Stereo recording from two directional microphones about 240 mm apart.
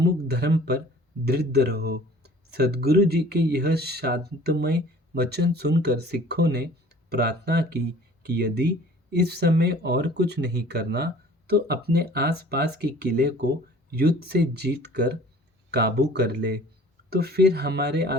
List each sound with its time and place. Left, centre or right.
0.0 s speech: right